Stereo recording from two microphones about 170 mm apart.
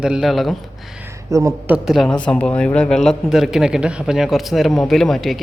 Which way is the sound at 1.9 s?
Centre (ahead or behind).